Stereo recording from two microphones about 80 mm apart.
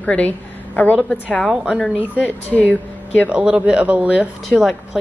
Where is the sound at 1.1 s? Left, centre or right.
Centre.